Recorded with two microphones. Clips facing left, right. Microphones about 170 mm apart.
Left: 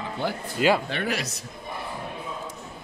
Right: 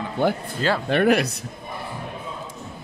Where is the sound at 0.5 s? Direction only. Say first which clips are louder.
Left 2 dB; 10° left (ahead or behind).